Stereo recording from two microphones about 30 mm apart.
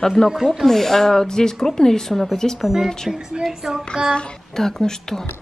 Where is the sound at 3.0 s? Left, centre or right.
Centre.